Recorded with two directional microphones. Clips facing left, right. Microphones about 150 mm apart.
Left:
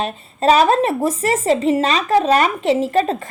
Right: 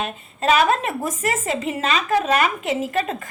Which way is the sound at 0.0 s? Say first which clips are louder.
Left 5 dB; 35° left (ahead or behind).